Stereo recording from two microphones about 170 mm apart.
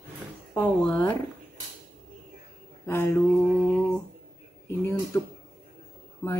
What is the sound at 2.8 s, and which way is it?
Speech, 15° left (ahead or behind).